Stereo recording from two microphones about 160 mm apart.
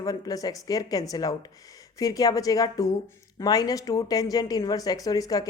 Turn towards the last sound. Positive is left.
turn(degrees=20)  # may be behind; listen again after turning